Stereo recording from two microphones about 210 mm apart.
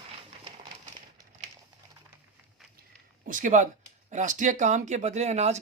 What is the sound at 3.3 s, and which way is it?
Speech, 40° right (ahead or behind).